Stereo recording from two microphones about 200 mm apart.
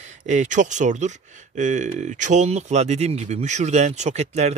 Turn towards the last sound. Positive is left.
turn(degrees=-35)  # may be behind; listen again after turning